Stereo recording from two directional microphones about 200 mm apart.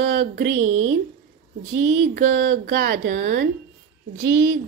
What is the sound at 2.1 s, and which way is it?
Speech, 50° right (ahead or behind).